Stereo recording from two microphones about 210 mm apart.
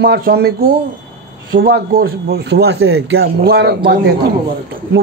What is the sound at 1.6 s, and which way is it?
Speech, 45° right (ahead or behind).